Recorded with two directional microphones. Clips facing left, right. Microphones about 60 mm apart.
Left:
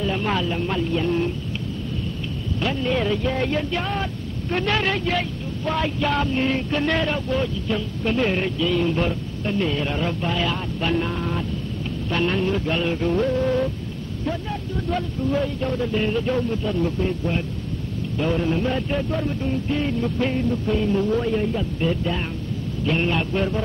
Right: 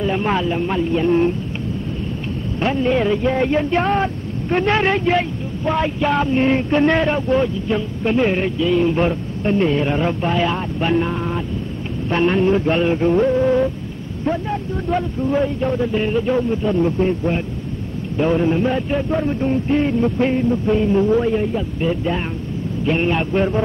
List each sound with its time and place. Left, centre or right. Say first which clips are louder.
0.0 s speech: right 4 dB; right
2.6 s speech: right 6 dB; right
14.9 s speech: right 4 dB; right